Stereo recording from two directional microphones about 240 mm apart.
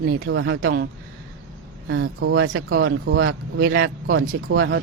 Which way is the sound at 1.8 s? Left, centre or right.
Right.